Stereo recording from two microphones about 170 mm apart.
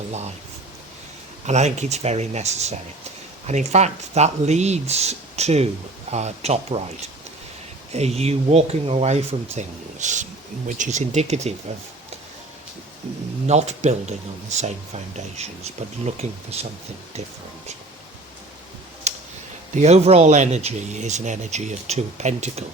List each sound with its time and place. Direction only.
1.5 s speech: 40° right (ahead or behind)
7.9 s speech: 40° right (ahead or behind)
13.5 s speech: 40° right (ahead or behind)
19.1 s a sound: 40° right (ahead or behind)
19.7 s speech: 40° right (ahead or behind)